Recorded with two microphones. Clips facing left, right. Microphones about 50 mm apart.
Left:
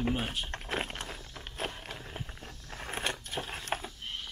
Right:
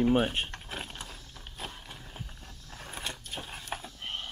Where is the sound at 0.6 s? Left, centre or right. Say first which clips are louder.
Left 5 dB; left.